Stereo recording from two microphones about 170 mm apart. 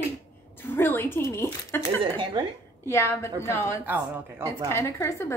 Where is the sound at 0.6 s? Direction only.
10° left (ahead or behind).